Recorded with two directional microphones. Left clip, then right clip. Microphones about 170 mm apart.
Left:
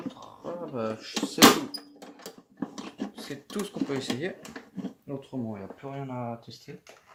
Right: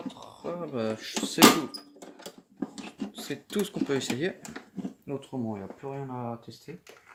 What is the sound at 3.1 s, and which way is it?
Speech, 45° right (ahead or behind).